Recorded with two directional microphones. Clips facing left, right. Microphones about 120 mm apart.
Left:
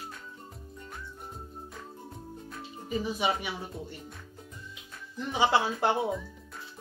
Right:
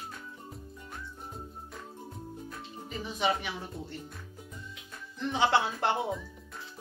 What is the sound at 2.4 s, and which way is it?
Speech, centre (ahead or behind).